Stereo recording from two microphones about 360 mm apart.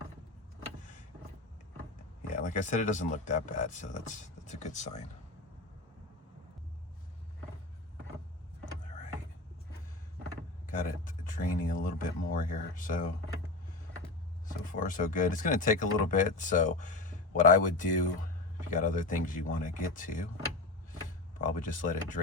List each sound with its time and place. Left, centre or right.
2.3 s speech: left
10.7 s speech: left
14.4 s speech: left
21.3 s speech: left